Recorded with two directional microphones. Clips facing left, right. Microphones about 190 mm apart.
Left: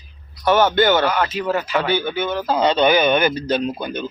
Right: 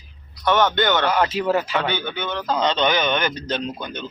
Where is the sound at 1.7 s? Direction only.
10° left (ahead or behind).